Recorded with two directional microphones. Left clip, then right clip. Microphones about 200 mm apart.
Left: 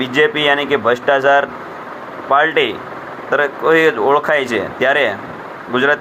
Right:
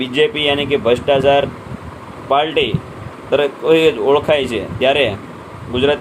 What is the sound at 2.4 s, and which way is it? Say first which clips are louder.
Speech: left 2 dB; 20° left (ahead or behind).